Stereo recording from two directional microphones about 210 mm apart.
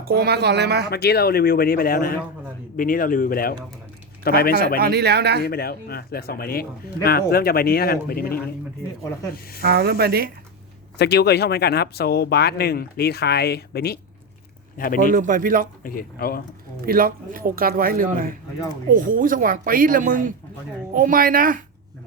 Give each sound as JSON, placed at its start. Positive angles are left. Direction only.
{"t": 0.0, "sound": "speech", "side_deg": -50}
{"t": 0.9, "sound": "speech", "side_deg": 50}
{"t": 4.8, "sound": "speech", "side_deg": -50}
{"t": 5.4, "sound": "speech", "side_deg": 45}
{"t": 9.6, "sound": "speech", "side_deg": -50}
{"t": 10.9, "sound": "speech", "side_deg": 50}
{"t": 15.1, "sound": "speech", "side_deg": -40}
{"t": 15.8, "sound": "speech", "side_deg": 40}
{"t": 16.8, "sound": "speech", "side_deg": -45}